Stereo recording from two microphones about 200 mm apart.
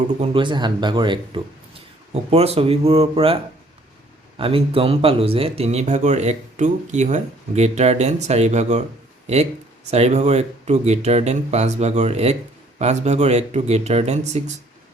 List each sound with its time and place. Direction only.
0.2 s speech: 25° right (ahead or behind)
4.4 s speech: 25° right (ahead or behind)